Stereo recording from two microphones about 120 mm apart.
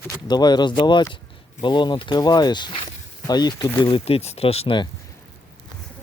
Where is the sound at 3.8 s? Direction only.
45° left (ahead or behind).